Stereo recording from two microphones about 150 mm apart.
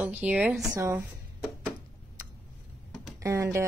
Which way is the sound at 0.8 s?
20° right (ahead or behind).